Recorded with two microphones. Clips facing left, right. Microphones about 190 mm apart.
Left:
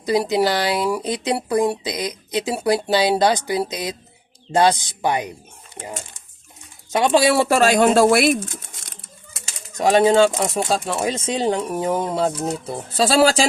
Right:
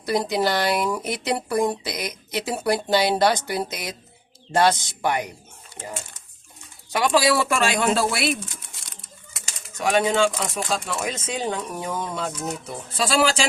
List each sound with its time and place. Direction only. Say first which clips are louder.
0.0 s speech: left 4 dB; 15° left (ahead or behind)
6.9 s speech: left 4 dB; 25° left (ahead or behind); by 8.8 s 45° left (ahead or behind)
9.7 s speech: left 6 dB; 35° left (ahead or behind)